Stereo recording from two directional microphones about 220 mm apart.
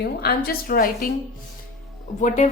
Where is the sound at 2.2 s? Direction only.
35° left (ahead or behind).